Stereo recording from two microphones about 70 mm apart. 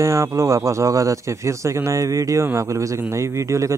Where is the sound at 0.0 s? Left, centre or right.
Right.